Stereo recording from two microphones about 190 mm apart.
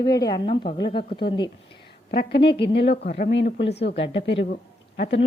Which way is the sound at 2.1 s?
55° left (ahead or behind).